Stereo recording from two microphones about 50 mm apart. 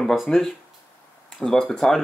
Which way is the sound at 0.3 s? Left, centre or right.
Centre.